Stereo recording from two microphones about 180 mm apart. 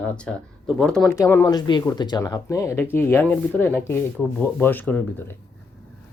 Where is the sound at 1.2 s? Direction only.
15° left (ahead or behind).